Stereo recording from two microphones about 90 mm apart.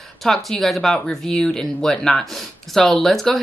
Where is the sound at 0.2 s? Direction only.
Centre (ahead or behind).